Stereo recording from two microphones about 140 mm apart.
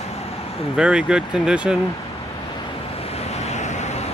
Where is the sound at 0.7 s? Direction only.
5° right (ahead or behind).